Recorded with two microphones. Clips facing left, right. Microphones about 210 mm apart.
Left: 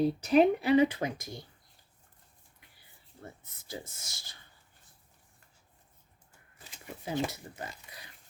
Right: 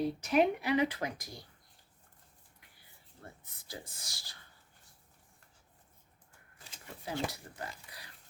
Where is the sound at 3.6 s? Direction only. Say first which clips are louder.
Left 5 dB; 25° left (ahead or behind).